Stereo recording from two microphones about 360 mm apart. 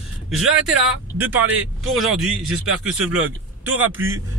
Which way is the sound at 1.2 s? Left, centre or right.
Centre.